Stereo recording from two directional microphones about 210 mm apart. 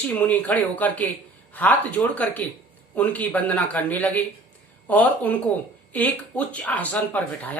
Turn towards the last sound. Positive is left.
turn(degrees=10)  # may be behind; listen again after turning